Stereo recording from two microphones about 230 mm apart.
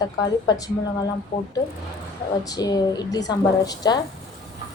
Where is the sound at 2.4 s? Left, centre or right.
Centre.